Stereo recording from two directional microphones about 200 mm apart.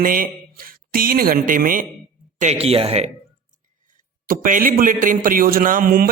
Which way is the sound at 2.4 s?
30° right (ahead or behind).